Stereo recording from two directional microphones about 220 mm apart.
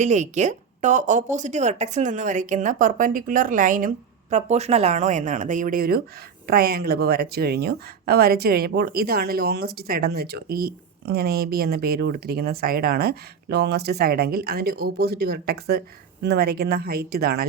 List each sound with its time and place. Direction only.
0.0 s a woman's voice: 30° right (ahead or behind)